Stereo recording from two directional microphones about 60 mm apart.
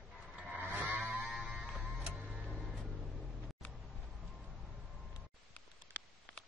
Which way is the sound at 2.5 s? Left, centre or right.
Centre.